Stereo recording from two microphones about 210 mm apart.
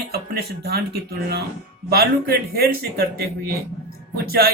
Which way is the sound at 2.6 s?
45° right (ahead or behind).